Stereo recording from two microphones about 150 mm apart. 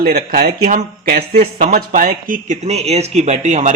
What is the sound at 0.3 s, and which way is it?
A man's voice, 70° right (ahead or behind).